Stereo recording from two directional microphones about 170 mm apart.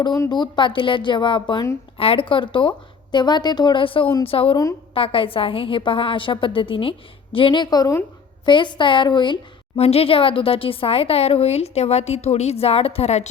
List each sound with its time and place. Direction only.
0.2 s a woman's voice: 25° left (ahead or behind)